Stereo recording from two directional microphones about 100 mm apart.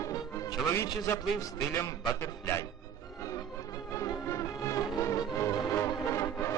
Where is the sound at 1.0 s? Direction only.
30° left (ahead or behind).